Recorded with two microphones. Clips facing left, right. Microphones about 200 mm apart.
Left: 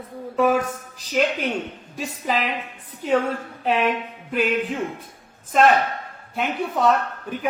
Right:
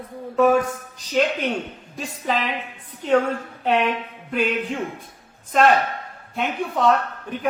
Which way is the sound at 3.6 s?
5° left (ahead or behind).